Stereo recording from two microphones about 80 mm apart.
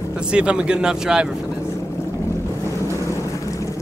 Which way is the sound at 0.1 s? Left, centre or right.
Centre.